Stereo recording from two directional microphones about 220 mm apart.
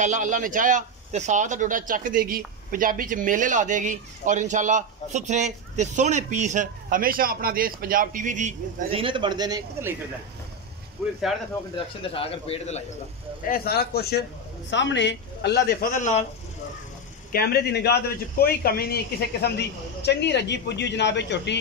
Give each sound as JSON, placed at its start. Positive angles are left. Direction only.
{"t": 0.0, "sound": "speech", "side_deg": -35}
{"t": 12.0, "sound": "a man's voice", "side_deg": 25}
{"t": 13.5, "sound": "a man's voice", "side_deg": 45}
{"t": 17.3, "sound": "a man's voice", "side_deg": 45}